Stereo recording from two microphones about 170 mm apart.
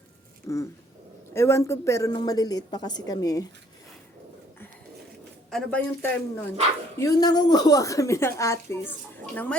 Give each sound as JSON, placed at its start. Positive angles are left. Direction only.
{"t": 0.4, "sound": "a woman's voice", "side_deg": 20}
{"t": 5.5, "sound": "speech", "side_deg": 5}
{"t": 7.0, "sound": "a woman's voice", "side_deg": 20}